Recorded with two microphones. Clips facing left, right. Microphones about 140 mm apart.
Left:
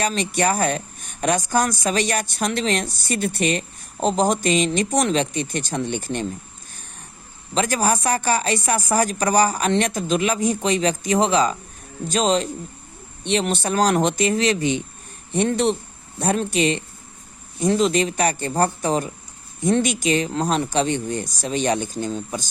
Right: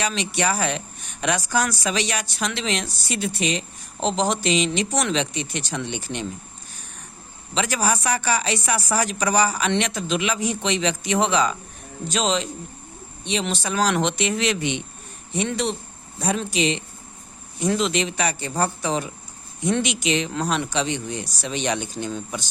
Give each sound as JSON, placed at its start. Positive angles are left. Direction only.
{"t": 0.0, "sound": "speech", "side_deg": 45}
{"t": 7.5, "sound": "speech", "side_deg": 45}
{"t": 15.3, "sound": "speech", "side_deg": 50}
{"t": 17.6, "sound": "speech", "side_deg": 40}